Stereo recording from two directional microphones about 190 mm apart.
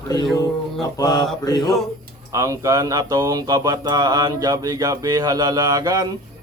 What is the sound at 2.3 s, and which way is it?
Speech, 15° right (ahead or behind).